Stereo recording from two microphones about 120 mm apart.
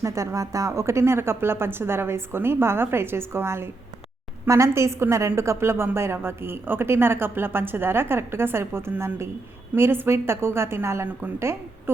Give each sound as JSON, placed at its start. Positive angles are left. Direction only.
{"t": 0.0, "sound": "a woman's voice", "side_deg": -25}